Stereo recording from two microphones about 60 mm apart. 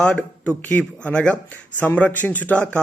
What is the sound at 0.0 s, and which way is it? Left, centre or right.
A man's voice, centre.